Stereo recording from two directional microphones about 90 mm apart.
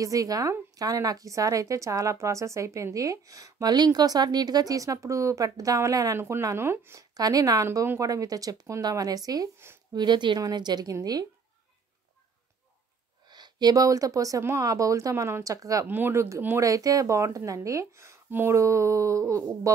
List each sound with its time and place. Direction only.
0.0 s a woman's voice: 40° right (ahead or behind)
6.1 s speech: 25° right (ahead or behind)
7.0 s speech: 45° right (ahead or behind)
7.6 s a woman's voice: 30° right (ahead or behind)
9.9 s speech: 55° right (ahead or behind)
13.3 s a woman's voice: 50° right (ahead or behind)
15.9 s a woman's voice: 25° right (ahead or behind)